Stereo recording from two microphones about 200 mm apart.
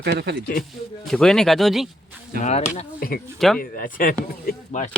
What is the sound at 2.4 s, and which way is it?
Speech, 35° left (ahead or behind).